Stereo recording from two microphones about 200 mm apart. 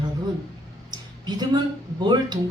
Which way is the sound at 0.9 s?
20° right (ahead or behind).